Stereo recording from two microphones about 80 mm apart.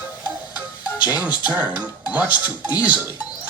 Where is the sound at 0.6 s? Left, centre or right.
Right.